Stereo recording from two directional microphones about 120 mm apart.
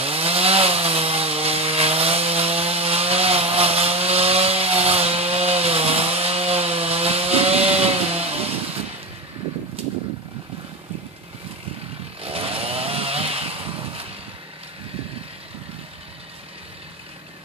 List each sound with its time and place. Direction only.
0.0 s chainsaw: 55° right (ahead or behind)
9.8 s vehicle: 55° right (ahead or behind)
12.2 s chainsaw: 55° right (ahead or behind)